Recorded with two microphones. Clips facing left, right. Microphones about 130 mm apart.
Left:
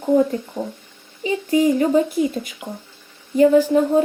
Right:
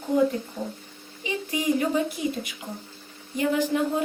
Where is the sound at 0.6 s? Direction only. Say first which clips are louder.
Left 5 dB; 50° left (ahead or behind).